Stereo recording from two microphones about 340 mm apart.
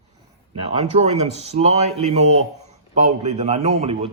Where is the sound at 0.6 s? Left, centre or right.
Centre.